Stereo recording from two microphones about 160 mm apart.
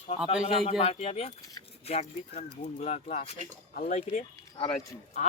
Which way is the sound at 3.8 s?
60° left (ahead or behind).